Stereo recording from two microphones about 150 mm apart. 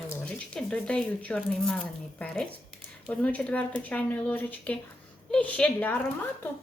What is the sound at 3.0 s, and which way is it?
Speech, 10° left (ahead or behind).